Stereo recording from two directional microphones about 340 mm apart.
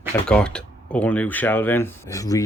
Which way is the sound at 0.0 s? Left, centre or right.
Centre.